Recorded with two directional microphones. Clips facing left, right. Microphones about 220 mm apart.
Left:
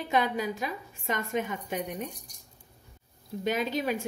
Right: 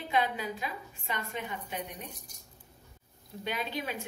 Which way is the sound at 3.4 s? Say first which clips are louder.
Left 7 dB; 45° left (ahead or behind).